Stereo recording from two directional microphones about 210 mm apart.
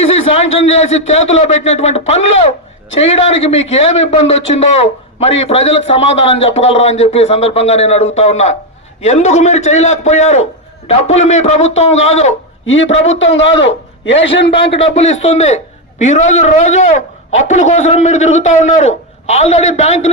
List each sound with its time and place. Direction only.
0.3 s a man's voice: 30° left (ahead or behind)
12.6 s a man's voice: 65° left (ahead or behind)
14.8 s a man's voice: 30° left (ahead or behind)